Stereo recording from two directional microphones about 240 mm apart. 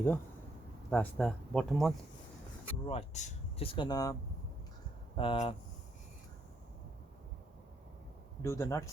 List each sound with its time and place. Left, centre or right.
0.9 s speech: centre
2.8 s speech: left
8.4 s speech: centre